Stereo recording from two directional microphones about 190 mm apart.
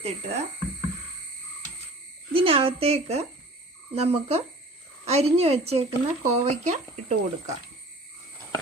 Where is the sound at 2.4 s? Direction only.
30° right (ahead or behind).